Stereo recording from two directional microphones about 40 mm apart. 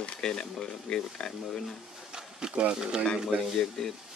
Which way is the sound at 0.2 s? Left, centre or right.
Centre.